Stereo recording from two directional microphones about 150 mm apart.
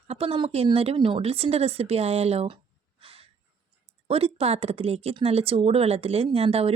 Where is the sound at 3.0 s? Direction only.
40° right (ahead or behind).